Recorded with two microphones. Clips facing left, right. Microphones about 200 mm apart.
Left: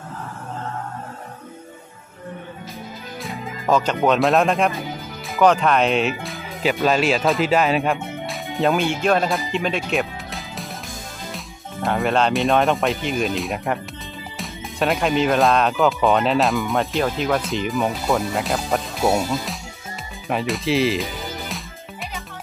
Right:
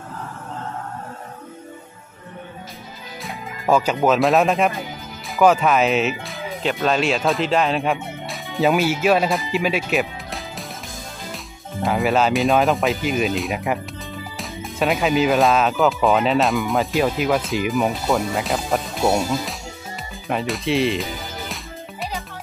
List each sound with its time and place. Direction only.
3.2 s speech: 5° right (ahead or behind)